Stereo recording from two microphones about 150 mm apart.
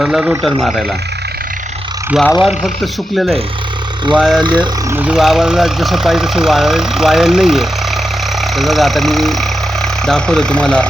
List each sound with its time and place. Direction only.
0.0 s speech: 5° right (ahead or behind)
0.6 s speech: 5° left (ahead or behind)
2.4 s speech: 5° right (ahead or behind)
4.4 s speech: 30° right (ahead or behind)
4.9 s speech: 10° right (ahead or behind); by 10.8 s 5° left (ahead or behind)